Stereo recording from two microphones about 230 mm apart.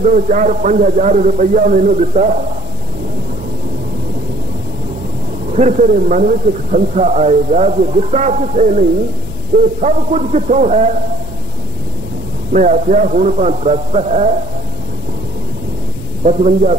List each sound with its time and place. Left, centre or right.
0.0 s a man's voice: right
5.5 s a man's voice: right
12.5 s a man's voice: right
16.3 s a man's voice: right